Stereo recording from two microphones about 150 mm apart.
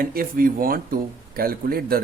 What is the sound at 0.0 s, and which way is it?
Speech, 70° right (ahead or behind).